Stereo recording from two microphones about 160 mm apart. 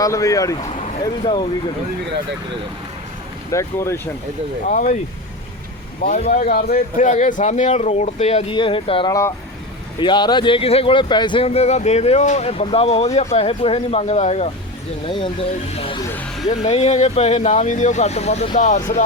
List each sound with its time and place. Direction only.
0.0 s speech: 20° left (ahead or behind)
1.0 s speech: 30° left (ahead or behind)
3.5 s speech: 20° left (ahead or behind)
4.7 s speech: 55° left (ahead or behind)
6.1 s speech: 50° left (ahead or behind)
6.5 s speech: 70° left (ahead or behind); by 9.0 s 35° left (ahead or behind)
9.0 s speech: 20° left (ahead or behind); by 14.5 s 45° left (ahead or behind)
15.0 s speech: 30° left (ahead or behind); by 19.0 s 50° left (ahead or behind)